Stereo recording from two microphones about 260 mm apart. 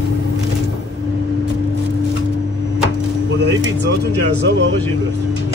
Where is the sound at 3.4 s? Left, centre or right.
Right.